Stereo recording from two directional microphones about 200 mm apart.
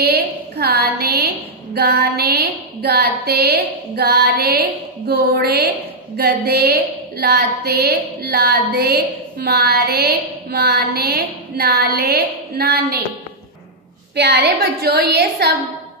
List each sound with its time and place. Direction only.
0.0 s a woman's voice: 50° right (ahead or behind)
14.1 s a woman's voice: 55° right (ahead or behind)